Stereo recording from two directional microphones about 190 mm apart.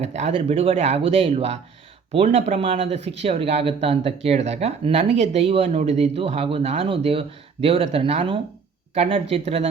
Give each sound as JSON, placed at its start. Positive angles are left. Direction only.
{"t": 0.0, "sound": "speech", "side_deg": -35}